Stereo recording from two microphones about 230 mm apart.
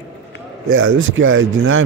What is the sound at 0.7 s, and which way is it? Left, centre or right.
Speech, right.